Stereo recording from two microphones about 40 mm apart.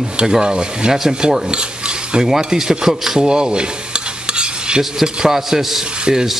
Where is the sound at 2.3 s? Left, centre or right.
Centre.